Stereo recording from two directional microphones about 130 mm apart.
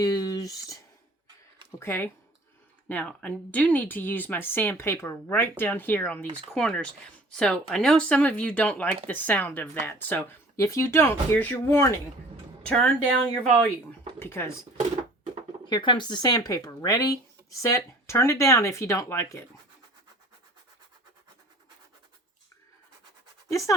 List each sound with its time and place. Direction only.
0.0 s a sound: 30° left (ahead or behind)
1.8 s speech: 15° left (ahead or behind)
12.6 s a woman's voice: 5° left (ahead or behind)
14.2 s speech: 20° left (ahead or behind)
15.6 s speech: 35° left (ahead or behind)
23.5 s speech: 25° left (ahead or behind)